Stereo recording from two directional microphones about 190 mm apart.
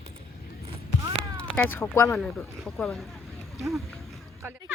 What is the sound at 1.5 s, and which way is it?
Speech, 10° left (ahead or behind).